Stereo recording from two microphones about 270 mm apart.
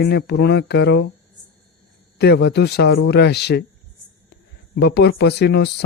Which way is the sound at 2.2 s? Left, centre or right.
Left.